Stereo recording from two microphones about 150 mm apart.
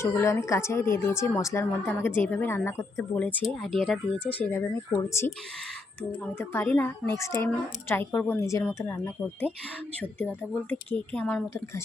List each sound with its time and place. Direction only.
0.0 s speech: 20° left (ahead or behind)
3.4 s speech: centre (ahead or behind)
4.4 s speech: 15° left (ahead or behind)
6.4 s speech: 15° left (ahead or behind)